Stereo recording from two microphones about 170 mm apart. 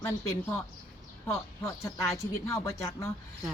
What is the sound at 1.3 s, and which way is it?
Speech, 15° left (ahead or behind).